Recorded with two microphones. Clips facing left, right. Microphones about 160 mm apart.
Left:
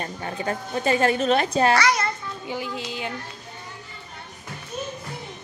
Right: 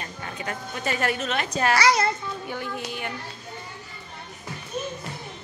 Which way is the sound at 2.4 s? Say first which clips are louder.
Left 4 dB; 15° left (ahead or behind).